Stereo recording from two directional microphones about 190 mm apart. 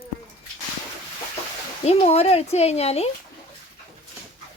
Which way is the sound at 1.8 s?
35° left (ahead or behind).